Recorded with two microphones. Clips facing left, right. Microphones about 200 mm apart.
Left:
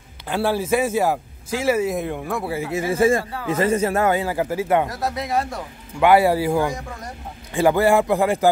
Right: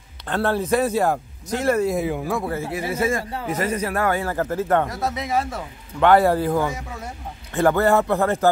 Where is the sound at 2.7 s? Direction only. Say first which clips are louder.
Left 7 dB; 25° left (ahead or behind).